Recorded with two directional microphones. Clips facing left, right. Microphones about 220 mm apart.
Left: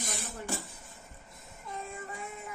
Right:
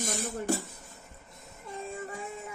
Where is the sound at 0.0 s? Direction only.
45° right (ahead or behind).